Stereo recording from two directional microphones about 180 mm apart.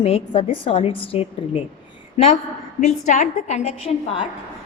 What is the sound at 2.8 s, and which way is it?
A woman's voice, 40° left (ahead or behind).